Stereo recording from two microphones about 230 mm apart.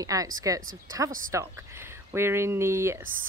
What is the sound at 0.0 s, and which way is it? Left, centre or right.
Speech, centre.